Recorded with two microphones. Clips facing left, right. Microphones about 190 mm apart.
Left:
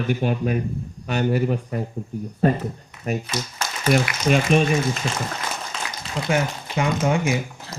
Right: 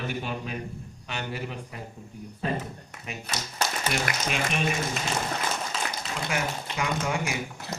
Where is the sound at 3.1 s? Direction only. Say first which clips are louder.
Left 14 dB; 45° left (ahead or behind).